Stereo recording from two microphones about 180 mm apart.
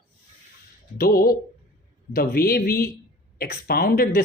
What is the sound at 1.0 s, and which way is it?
Speech, 55° left (ahead or behind).